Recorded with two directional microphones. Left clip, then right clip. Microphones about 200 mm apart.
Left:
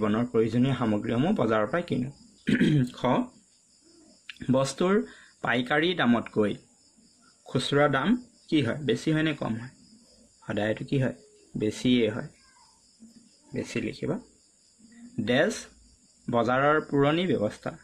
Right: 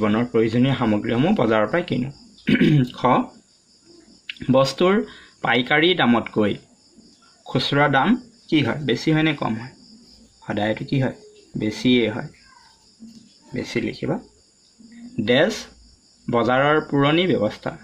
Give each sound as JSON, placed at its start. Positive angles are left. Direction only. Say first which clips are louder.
{"t": 0.0, "sound": "speech", "louder": "right 6 dB", "side_deg": 20}
{"t": 4.3, "sound": "speech", "louder": "right 8 dB", "side_deg": 25}
{"t": 7.7, "sound": "speech", "louder": "right 6 dB", "side_deg": 30}
{"t": 13.5, "sound": "speech", "louder": "right 6 dB", "side_deg": 30}
{"t": 15.2, "sound": "speech", "louder": "right 7 dB", "side_deg": 25}